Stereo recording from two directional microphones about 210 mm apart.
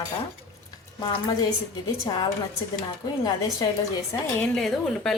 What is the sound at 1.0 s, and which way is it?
A woman's voice, 20° left (ahead or behind).